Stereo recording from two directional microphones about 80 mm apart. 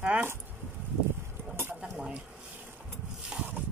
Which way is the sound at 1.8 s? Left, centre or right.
Centre.